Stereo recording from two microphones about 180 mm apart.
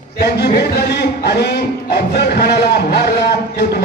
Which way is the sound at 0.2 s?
65° left (ahead or behind).